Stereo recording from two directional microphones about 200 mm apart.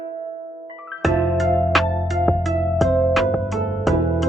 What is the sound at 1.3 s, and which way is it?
Music, centre (ahead or behind).